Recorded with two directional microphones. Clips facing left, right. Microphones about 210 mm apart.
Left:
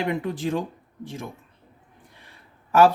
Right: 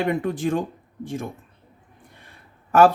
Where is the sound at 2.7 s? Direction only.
50° right (ahead or behind).